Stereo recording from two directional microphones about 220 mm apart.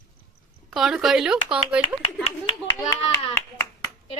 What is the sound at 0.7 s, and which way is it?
Speech, centre (ahead or behind).